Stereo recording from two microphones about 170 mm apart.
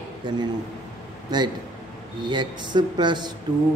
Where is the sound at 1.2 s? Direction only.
25° right (ahead or behind).